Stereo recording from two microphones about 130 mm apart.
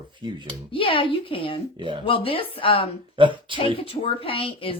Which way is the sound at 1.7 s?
40° right (ahead or behind).